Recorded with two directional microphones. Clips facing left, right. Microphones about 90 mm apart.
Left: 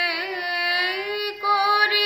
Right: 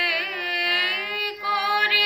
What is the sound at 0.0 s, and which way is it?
Carnatic music, 20° left (ahead or behind).